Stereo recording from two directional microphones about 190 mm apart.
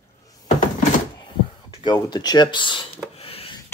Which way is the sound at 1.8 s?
20° left (ahead or behind).